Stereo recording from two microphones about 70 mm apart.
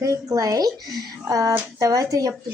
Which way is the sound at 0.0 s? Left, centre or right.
Right.